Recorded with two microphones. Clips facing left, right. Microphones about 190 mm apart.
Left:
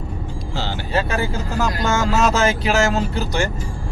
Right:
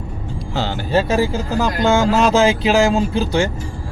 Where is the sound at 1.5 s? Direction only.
15° right (ahead or behind).